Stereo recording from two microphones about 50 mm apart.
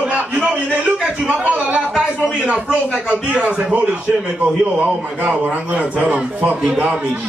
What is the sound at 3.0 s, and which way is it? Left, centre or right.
Speech, right.